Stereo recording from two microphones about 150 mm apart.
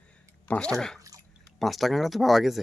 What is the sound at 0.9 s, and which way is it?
Drip, 20° right (ahead or behind).